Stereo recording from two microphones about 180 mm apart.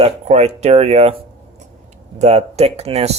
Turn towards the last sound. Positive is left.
turn(degrees=-35)  # may be behind; listen again after turning